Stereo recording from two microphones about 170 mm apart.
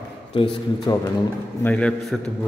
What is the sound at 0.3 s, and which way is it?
Speech, 30° left (ahead or behind).